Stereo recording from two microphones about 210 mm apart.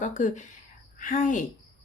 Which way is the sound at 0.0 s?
35° left (ahead or behind).